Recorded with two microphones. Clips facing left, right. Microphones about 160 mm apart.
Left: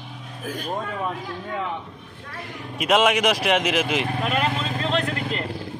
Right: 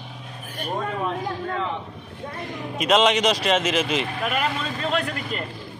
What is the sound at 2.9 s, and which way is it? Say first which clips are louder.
Speech: even; 10° left (ahead or behind).